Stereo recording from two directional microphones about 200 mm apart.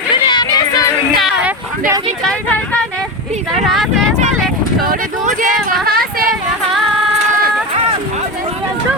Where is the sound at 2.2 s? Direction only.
5° left (ahead or behind).